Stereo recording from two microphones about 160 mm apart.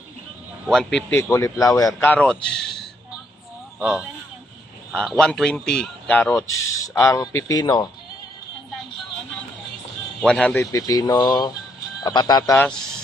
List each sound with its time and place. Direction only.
0.7 s speech: centre (ahead or behind)
1.1 s speech: 20° left (ahead or behind)
2.0 s speech: 10° left (ahead or behind)
6.8 s speech: 20° left (ahead or behind)
10.2 s speech: 10° left (ahead or behind); by 12.5 s 25° left (ahead or behind)